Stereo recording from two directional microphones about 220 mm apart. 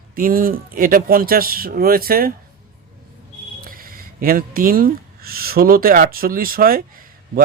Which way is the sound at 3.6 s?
40° right (ahead or behind).